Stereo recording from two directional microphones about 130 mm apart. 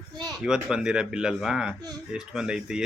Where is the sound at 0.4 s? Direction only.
5° right (ahead or behind).